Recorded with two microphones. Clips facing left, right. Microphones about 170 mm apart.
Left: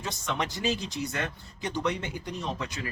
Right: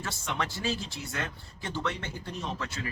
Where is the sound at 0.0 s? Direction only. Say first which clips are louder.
Left 2 dB; 20° left (ahead or behind).